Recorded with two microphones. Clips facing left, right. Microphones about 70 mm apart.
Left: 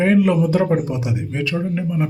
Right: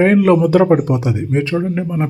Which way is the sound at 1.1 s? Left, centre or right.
Right.